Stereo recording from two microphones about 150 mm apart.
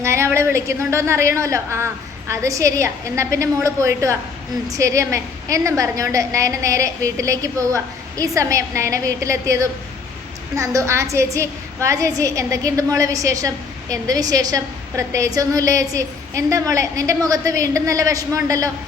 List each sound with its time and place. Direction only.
0.0 s a woman's voice: 15° right (ahead or behind)